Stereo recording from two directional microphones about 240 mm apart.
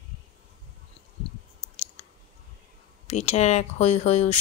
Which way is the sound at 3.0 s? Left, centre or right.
Left.